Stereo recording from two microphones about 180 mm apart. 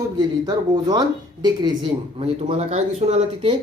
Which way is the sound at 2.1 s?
35° right (ahead or behind).